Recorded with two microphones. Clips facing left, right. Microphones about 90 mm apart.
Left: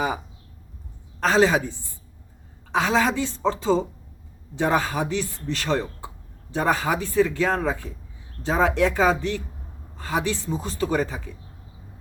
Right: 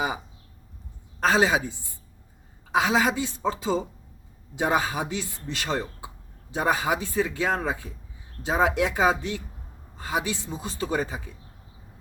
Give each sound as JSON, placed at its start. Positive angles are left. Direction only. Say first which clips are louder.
{"t": 1.2, "sound": "speech", "louder": "left 2 dB", "side_deg": -15}
{"t": 2.7, "sound": "speech", "louder": "left 1 dB", "side_deg": -10}